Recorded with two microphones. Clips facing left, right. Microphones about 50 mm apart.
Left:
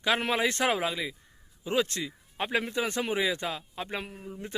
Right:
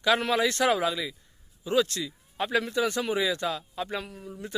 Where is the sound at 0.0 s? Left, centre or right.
Left.